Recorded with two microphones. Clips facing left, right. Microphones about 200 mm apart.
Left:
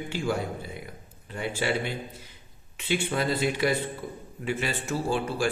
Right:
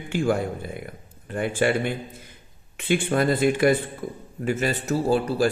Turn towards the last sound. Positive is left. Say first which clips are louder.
# right 6 dB
turn(degrees=-40)  # may be behind; listen again after turning